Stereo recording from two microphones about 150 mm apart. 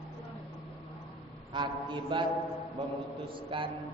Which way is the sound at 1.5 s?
30° right (ahead or behind).